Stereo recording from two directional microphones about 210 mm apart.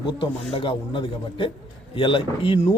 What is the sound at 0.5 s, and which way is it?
A man's voice, 25° left (ahead or behind).